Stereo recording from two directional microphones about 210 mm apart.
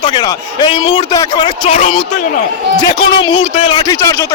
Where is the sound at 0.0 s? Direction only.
20° left (ahead or behind).